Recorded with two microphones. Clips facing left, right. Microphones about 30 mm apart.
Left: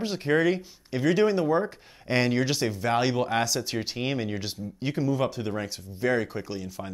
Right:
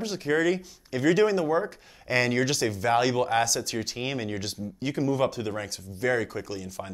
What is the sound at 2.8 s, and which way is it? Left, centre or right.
Speech, centre.